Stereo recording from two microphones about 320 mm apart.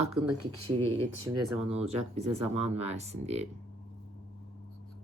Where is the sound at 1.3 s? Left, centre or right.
Centre.